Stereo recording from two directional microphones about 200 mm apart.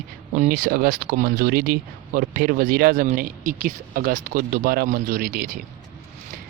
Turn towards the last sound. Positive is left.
turn(degrees=-45)  # may be behind; listen again after turning